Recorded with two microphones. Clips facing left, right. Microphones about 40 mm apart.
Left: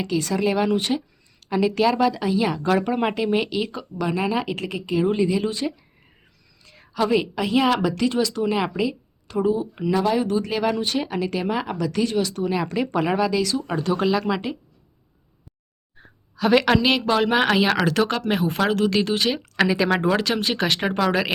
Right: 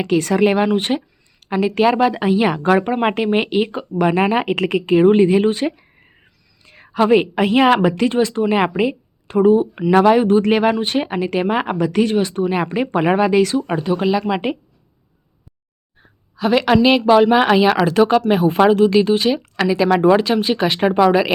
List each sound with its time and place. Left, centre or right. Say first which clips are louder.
0.0 s a woman's voice: right 7 dB; right
2.6 s speech: right 5 dB; right
4.0 s a woman's voice: right 7 dB; right
13.8 s speech: right 1 dB; centre
16.5 s speech: right 4 dB; centre